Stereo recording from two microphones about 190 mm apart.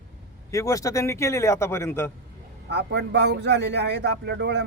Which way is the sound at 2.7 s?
60° right (ahead or behind).